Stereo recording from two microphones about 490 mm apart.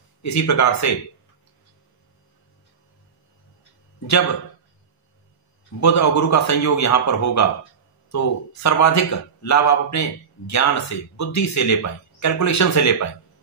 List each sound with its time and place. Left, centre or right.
0.2 s a man's voice: left
5.8 s a man's voice: left